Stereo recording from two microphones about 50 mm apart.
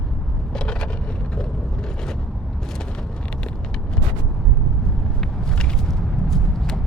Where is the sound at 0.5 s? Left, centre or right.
Centre.